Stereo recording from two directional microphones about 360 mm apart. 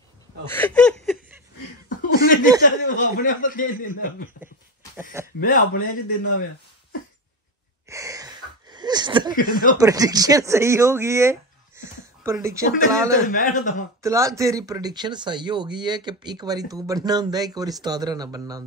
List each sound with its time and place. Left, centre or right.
0.5 s speech: centre
1.9 s chuckle: left
2.9 s speech: left
5.4 s speech: left
7.9 s wheeze: centre
9.3 s speech: left
9.8 s speech: centre
13.3 s speech: left
14.0 s speech: centre